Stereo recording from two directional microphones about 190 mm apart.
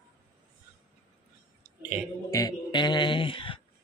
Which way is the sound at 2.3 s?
20° left (ahead or behind).